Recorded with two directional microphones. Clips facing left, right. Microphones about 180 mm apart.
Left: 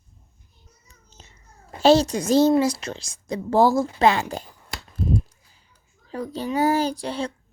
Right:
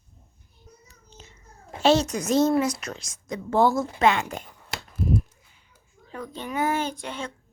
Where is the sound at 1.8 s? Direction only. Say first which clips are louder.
Left 4 dB; 35° left (ahead or behind).